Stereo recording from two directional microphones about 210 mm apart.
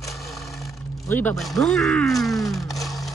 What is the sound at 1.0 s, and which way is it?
Speech, 10° left (ahead or behind).